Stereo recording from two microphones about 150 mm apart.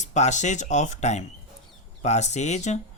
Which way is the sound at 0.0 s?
50° left (ahead or behind).